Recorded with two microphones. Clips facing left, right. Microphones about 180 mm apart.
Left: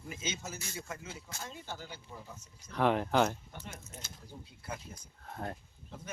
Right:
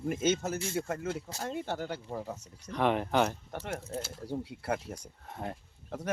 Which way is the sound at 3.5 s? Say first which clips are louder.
Right 11 dB; 70° right (ahead or behind).